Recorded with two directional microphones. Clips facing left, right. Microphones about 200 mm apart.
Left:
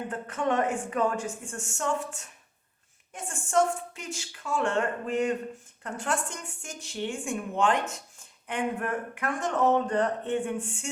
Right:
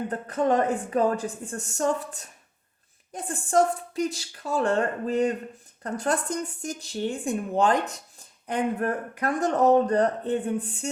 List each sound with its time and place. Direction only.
0.1 s speech: 35° right (ahead or behind)